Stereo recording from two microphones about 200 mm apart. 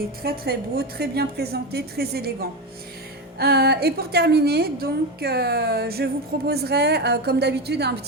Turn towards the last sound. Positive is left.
turn(degrees=-55)  # may be behind; listen again after turning